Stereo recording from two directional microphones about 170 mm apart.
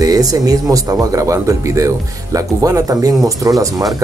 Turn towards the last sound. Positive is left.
turn(degrees=-20)  # may be behind; listen again after turning